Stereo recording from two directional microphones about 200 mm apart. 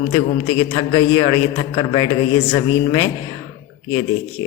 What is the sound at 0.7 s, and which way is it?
A woman's voice, 25° left (ahead or behind).